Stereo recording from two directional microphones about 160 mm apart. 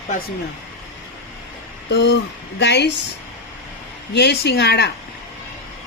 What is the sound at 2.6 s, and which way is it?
Speech, 90° left.